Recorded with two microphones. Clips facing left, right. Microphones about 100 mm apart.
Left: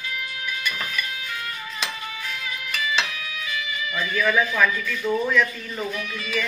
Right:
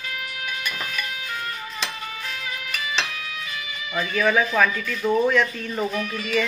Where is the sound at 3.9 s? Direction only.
45° right (ahead or behind).